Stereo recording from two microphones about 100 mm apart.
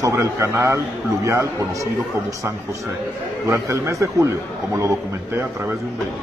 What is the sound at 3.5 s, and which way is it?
Speech, 30° right (ahead or behind).